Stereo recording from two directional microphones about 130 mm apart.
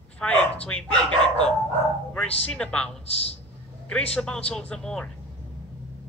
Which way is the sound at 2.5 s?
5° left (ahead or behind).